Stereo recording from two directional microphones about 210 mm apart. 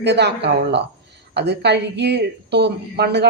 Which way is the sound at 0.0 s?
55° right (ahead or behind).